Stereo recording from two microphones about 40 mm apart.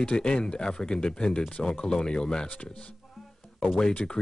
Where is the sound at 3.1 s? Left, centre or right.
Centre.